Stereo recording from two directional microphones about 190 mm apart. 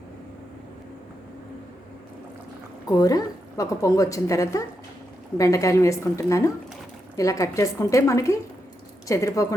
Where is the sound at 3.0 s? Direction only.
20° left (ahead or behind).